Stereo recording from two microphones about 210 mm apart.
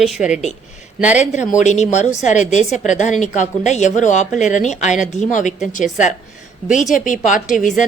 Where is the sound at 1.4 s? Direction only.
35° left (ahead or behind).